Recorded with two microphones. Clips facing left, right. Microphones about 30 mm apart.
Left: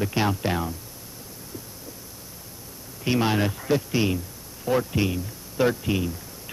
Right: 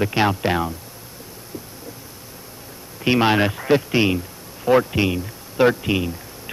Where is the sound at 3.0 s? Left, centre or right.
Right.